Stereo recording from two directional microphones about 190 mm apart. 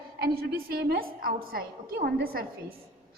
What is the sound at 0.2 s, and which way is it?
A woman's voice, 50° right (ahead or behind).